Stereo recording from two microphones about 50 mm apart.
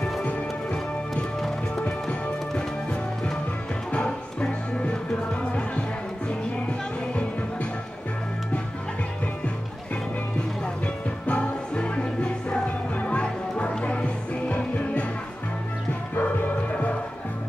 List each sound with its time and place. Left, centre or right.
1.8 s music: centre
3.9 s music: left
11.2 s music: left
16.2 s music: left